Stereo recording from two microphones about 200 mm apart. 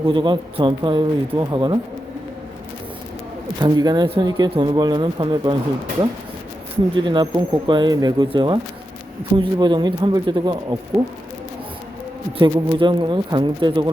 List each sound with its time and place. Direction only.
0.0 s speech: 25° right (ahead or behind)
3.6 s speech: 20° right (ahead or behind)
6.9 s speech: 25° right (ahead or behind)
12.4 s speech: 25° right (ahead or behind)